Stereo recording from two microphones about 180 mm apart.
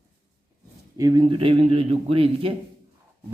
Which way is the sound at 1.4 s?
30° right (ahead or behind).